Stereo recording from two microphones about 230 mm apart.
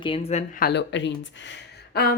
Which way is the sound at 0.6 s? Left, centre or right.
Left.